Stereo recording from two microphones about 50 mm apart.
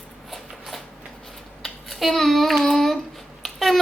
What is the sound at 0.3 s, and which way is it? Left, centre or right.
Shuffling cards, centre.